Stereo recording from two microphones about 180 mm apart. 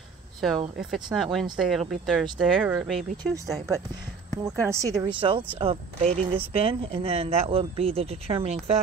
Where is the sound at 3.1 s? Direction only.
15° right (ahead or behind).